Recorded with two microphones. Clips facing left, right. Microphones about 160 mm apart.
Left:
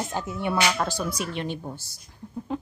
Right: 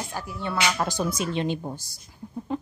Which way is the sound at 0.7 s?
10° right (ahead or behind).